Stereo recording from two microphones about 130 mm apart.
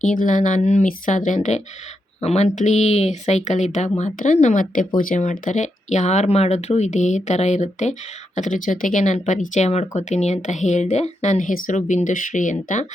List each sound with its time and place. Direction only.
0.0 s speech: 75° left (ahead or behind)
4.9 s speech: 80° left; by 7.9 s 65° left (ahead or behind)
8.4 s speech: 80° left